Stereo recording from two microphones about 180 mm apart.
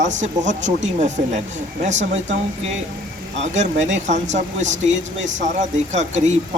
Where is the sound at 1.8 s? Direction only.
40° right (ahead or behind).